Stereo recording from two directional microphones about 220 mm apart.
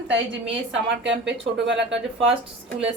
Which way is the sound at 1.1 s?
55° right (ahead or behind).